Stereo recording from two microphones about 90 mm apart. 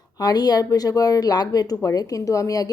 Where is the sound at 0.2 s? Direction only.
45° left (ahead or behind).